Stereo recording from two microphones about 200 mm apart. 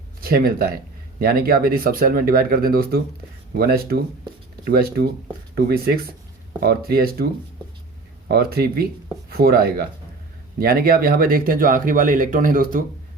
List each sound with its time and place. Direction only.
0.2 s speech: 50° right (ahead or behind)
8.3 s speech: 50° right (ahead or behind)